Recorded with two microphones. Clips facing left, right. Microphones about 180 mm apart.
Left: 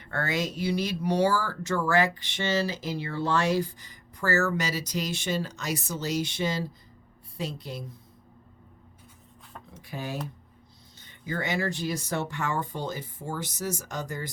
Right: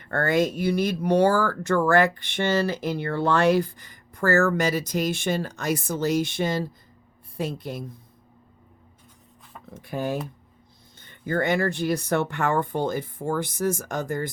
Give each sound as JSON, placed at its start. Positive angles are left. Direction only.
{"t": 0.0, "sound": "speech", "side_deg": -50}
{"t": 9.7, "sound": "speech", "side_deg": -50}